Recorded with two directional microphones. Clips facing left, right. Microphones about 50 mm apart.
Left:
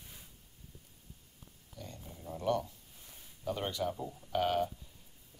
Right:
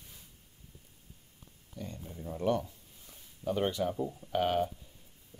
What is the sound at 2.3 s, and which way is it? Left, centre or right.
Speech, right.